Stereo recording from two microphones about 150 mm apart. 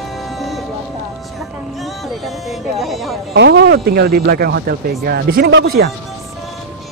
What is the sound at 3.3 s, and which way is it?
Speech, 90° right.